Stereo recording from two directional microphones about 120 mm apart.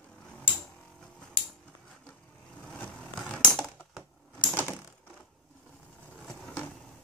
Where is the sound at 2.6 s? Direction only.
10° left (ahead or behind).